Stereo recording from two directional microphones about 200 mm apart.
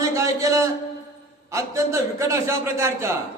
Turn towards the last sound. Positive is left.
turn(degrees=-15)  # may be behind; listen again after turning